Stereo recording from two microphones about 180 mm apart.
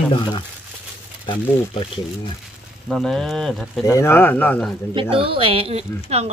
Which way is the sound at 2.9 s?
5° left (ahead or behind).